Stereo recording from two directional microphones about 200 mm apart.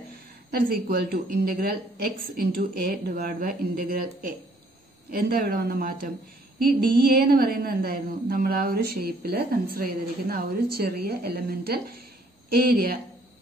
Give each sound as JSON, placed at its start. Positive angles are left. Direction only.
{"t": 0.5, "sound": "a woman's voice", "side_deg": -50}